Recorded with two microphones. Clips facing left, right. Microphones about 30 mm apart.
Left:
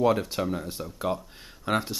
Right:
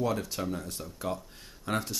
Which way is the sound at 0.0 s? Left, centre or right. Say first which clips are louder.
Left 7 dB; left.